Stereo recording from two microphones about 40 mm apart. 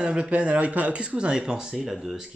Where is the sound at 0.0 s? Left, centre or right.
Centre.